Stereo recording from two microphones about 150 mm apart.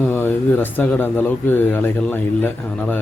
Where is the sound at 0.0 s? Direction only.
15° left (ahead or behind).